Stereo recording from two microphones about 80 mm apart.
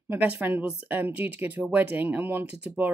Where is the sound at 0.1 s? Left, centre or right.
Right.